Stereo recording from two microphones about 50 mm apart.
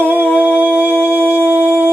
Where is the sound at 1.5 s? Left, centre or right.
Right.